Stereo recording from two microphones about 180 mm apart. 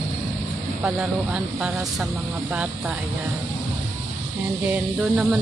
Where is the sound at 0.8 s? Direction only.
5° right (ahead or behind).